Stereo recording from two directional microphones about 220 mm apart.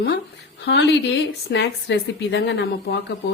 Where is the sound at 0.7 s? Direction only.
50° left (ahead or behind).